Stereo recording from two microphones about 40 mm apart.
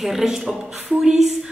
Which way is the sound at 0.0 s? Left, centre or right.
Centre.